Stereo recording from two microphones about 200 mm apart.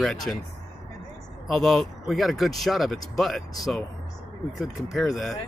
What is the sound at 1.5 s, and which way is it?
Speech, centre (ahead or behind).